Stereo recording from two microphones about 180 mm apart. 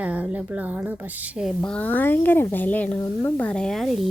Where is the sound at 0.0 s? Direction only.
10° right (ahead or behind).